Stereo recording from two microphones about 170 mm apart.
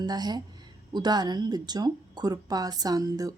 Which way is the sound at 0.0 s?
25° right (ahead or behind).